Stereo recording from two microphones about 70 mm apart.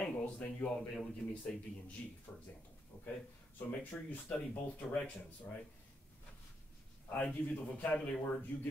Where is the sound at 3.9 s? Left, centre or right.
Centre.